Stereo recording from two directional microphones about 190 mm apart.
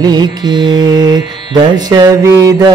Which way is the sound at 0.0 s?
20° right (ahead or behind).